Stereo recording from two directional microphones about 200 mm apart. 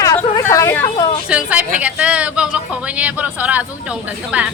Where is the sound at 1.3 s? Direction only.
5° right (ahead or behind).